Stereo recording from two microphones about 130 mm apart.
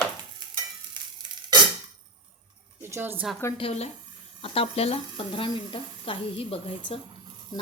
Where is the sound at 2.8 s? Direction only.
15° right (ahead or behind).